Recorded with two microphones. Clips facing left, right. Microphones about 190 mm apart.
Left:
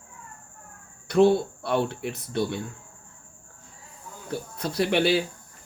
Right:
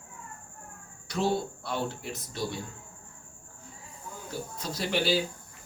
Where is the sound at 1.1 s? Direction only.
60° left (ahead or behind).